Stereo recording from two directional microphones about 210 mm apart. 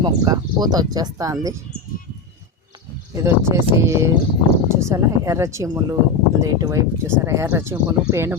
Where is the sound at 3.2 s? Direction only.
15° right (ahead or behind).